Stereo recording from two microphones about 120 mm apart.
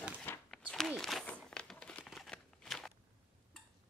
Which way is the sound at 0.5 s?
5° left (ahead or behind).